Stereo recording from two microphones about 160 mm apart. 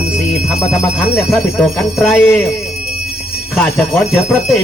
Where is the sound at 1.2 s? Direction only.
10° left (ahead or behind).